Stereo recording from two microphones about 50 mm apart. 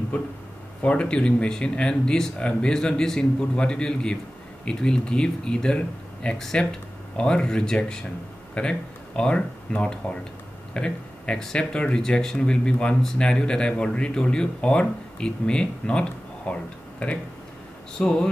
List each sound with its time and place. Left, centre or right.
0.1 s speech: left
10.7 s a sound: centre
11.3 s speech: centre
17.9 s speech: centre